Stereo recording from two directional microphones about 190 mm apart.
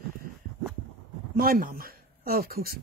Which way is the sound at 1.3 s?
50° right (ahead or behind).